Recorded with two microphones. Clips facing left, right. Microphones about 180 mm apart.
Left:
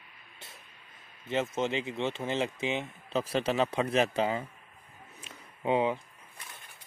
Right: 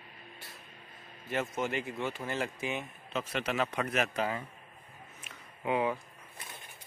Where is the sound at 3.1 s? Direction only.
35° left (ahead or behind).